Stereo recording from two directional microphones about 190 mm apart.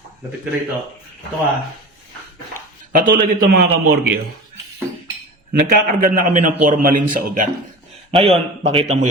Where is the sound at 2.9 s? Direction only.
45° right (ahead or behind).